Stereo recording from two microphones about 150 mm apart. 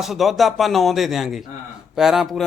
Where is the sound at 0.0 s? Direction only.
Centre (ahead or behind).